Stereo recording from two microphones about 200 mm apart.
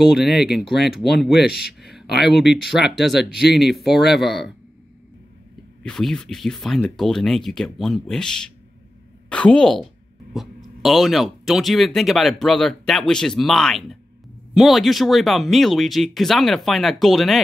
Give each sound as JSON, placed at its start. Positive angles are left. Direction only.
{"t": 0.0, "sound": "speech", "side_deg": 0}
{"t": 1.5, "sound": "speech", "side_deg": 50}
{"t": 1.8, "sound": "a sound", "side_deg": 0}
{"t": 2.3, "sound": "speech", "side_deg": 0}
{"t": 5.9, "sound": "speech", "side_deg": 5}